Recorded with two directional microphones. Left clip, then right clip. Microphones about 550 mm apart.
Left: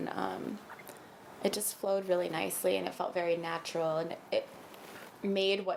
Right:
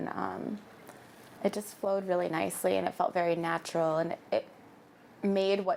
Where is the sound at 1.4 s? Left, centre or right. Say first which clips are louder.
Right 2 dB; centre.